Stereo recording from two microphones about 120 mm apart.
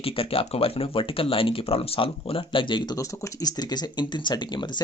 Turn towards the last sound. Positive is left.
turn(degrees=40)  # may be behind; listen again after turning